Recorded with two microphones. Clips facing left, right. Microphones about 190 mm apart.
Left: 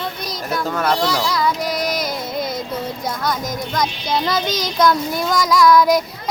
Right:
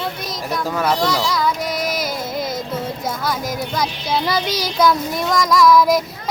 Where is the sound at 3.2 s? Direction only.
5° right (ahead or behind).